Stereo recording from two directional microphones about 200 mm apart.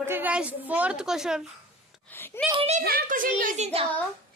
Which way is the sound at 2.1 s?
10° left (ahead or behind).